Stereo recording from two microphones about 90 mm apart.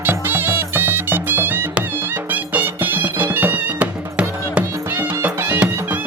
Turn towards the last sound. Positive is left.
turn(degrees=-25)  # may be behind; listen again after turning